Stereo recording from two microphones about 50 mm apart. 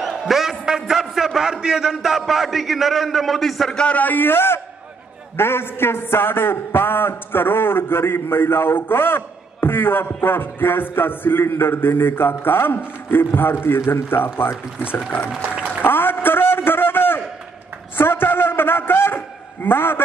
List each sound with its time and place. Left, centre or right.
0.0 s a man's voice: centre
3.7 s a man's voice: left
4.0 s a man's voice: left
15.0 s speech: left
15.5 s applause: right
15.8 s a sound: left